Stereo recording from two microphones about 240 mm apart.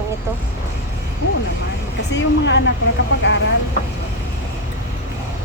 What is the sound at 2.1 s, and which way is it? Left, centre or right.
Speech, left.